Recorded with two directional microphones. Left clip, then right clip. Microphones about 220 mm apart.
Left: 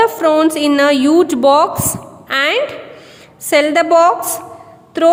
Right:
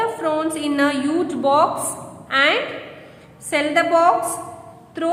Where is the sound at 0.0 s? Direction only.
45° left (ahead or behind).